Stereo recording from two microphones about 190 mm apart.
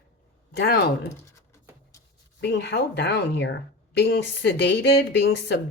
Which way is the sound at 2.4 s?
65° left (ahead or behind).